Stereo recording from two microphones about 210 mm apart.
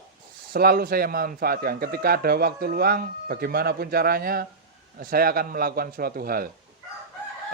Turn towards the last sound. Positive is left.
turn(degrees=-45)  # may be behind; listen again after turning